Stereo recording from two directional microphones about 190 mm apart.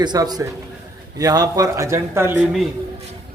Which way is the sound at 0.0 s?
20° right (ahead or behind).